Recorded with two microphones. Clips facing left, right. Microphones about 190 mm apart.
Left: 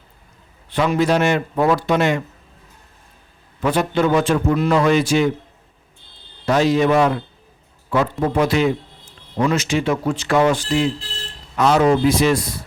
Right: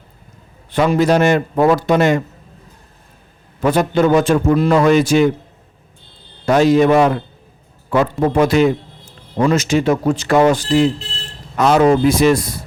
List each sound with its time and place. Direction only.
0.7 s a man's voice: 45° right (ahead or behind)
3.6 s a man's voice: 45° right (ahead or behind)
6.4 s a man's voice: 50° right (ahead or behind)
8.4 s a man's voice: 45° right (ahead or behind)